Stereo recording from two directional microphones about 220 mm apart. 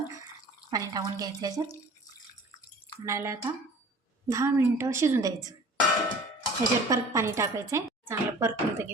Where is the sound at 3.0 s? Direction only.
15° right (ahead or behind).